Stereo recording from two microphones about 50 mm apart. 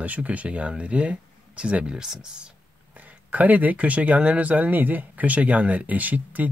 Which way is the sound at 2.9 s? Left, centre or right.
Right.